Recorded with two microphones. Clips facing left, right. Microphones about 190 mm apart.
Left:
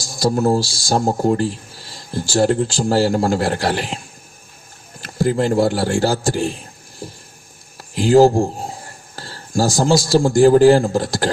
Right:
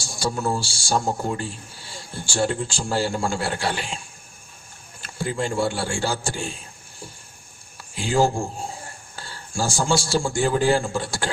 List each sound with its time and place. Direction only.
0.0 s speech: 40° left (ahead or behind)
4.9 s speech: 40° left (ahead or behind)
7.8 s speech: 40° left (ahead or behind)